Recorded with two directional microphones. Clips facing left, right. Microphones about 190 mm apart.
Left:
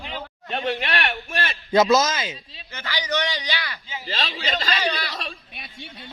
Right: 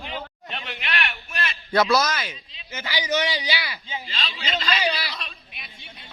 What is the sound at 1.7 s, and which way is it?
Speech, 25° left (ahead or behind).